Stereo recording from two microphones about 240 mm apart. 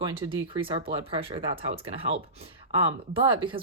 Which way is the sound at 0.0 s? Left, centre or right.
Right.